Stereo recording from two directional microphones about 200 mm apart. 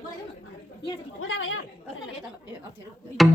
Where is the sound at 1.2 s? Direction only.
90° left.